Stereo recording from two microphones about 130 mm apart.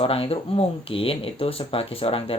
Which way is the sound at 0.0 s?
45° left (ahead or behind).